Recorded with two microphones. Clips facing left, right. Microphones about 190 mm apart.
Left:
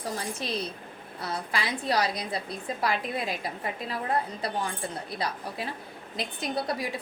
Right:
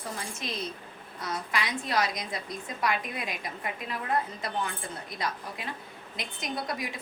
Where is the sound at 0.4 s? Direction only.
35° left (ahead or behind).